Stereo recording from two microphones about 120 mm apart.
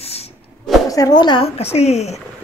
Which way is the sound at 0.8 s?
30° left (ahead or behind).